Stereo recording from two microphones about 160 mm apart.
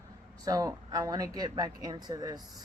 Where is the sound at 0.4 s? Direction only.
20° right (ahead or behind).